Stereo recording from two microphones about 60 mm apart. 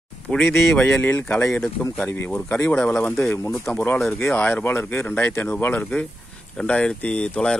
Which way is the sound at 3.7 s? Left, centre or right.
Centre.